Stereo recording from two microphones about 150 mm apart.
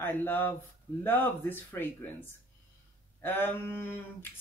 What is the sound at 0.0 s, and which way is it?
Speech, 15° left (ahead or behind).